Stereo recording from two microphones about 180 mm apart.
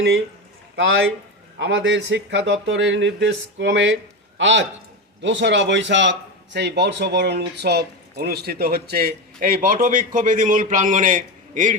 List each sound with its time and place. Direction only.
1.5 s a man's voice: 85° right; by 11.7 s 45° right (ahead or behind)